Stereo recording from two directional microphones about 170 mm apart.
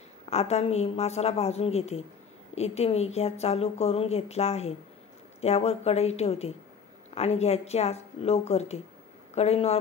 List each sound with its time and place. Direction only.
0.3 s speech: 40° left (ahead or behind)